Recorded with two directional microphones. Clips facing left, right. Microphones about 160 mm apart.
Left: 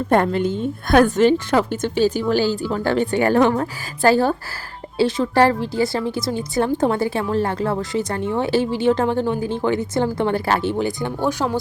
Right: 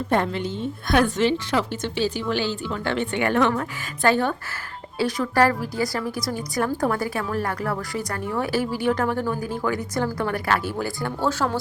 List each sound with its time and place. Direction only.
0.1 s a woman's voice: 50° left (ahead or behind); by 11.5 s 15° left (ahead or behind)